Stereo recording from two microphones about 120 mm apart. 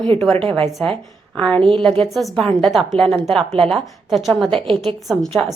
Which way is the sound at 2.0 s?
Centre (ahead or behind).